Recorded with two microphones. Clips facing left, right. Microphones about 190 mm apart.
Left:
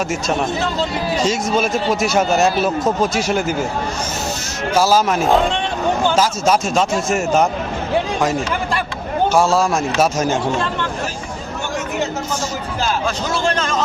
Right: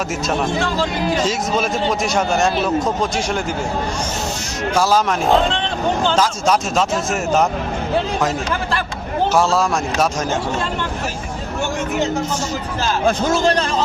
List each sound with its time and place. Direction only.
1.2 s speech: centre (ahead or behind)
4.7 s speech: 5° left (ahead or behind)
9.3 s speech: centre (ahead or behind)
13.1 s a man's voice: 50° right (ahead or behind)